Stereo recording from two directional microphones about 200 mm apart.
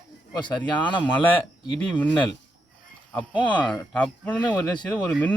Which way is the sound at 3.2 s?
5° left (ahead or behind).